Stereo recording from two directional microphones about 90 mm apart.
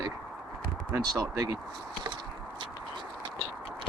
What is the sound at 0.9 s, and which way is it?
Speech, 40° right (ahead or behind).